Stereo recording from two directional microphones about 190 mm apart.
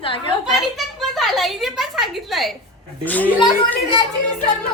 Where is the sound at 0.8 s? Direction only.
Centre (ahead or behind).